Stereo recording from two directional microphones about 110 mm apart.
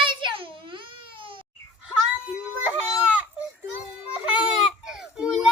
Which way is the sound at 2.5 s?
15° right (ahead or behind).